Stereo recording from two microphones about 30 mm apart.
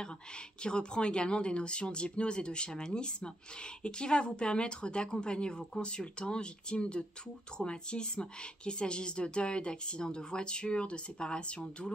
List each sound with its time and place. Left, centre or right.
0.6 s speech: left